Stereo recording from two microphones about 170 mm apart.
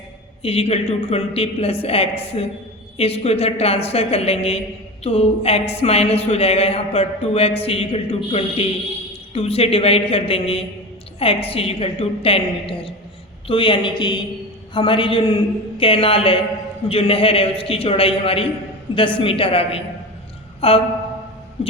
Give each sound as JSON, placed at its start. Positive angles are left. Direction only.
{"t": 0.4, "sound": "a woman's voice", "side_deg": 35}
{"t": 20.6, "sound": "a sound", "side_deg": 35}
{"t": 21.6, "sound": "music", "side_deg": 35}